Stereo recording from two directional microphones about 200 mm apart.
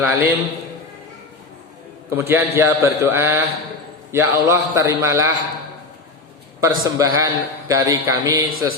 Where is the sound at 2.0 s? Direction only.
10° right (ahead or behind).